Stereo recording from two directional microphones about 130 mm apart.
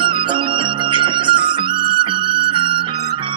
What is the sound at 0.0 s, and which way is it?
Music, 40° right (ahead or behind).